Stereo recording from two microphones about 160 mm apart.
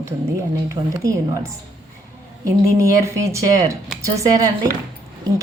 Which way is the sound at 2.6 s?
20° right (ahead or behind).